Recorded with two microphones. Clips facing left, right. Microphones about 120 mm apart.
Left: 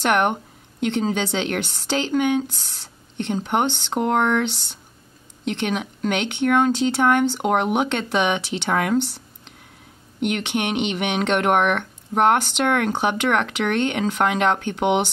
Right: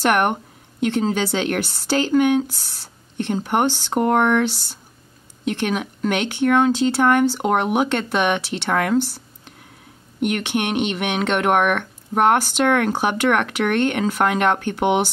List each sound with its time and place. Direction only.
0.0 s speech: 5° right (ahead or behind)
10.5 s speech: 5° right (ahead or behind)